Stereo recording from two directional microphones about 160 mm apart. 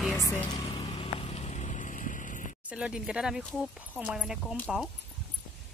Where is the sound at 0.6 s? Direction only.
35° left (ahead or behind); by 2.4 s 55° left (ahead or behind).